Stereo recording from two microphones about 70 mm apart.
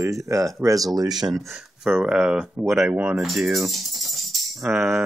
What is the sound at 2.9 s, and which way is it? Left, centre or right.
Speech, right.